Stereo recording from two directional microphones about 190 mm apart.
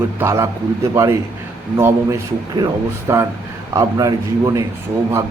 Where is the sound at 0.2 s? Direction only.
15° right (ahead or behind).